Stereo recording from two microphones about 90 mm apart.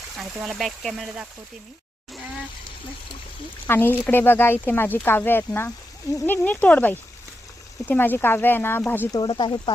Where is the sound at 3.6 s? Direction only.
25° left (ahead or behind).